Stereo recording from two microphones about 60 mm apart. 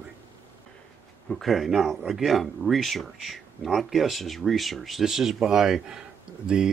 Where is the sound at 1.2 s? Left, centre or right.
Centre.